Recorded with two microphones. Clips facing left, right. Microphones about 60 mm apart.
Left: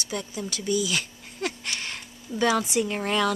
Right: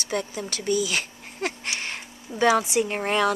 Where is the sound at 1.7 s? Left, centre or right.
Right.